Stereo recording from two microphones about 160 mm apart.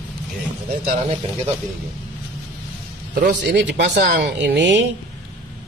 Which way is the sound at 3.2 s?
90° right.